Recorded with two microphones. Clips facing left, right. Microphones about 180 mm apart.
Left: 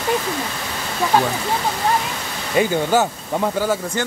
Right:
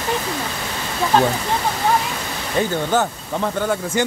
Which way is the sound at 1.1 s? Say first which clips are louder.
Right 2 dB; 10° left (ahead or behind).